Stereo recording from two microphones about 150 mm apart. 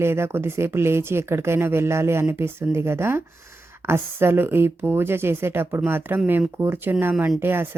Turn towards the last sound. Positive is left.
turn(degrees=-15)  # may be behind; listen again after turning